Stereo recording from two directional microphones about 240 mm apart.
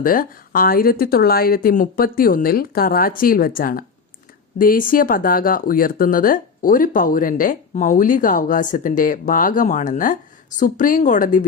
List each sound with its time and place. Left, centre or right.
0.0 s speech: left